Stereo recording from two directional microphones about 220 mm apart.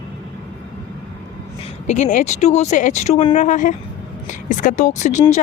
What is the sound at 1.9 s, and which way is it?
Speech, 35° left (ahead or behind).